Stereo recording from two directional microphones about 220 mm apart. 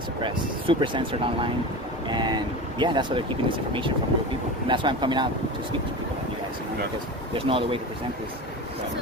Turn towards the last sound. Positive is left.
turn(degrees=-25)  # may be behind; listen again after turning